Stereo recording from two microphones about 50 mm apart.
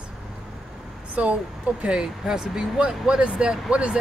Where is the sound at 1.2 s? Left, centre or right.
Right.